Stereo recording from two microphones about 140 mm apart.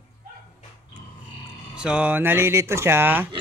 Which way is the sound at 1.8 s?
10° right (ahead or behind).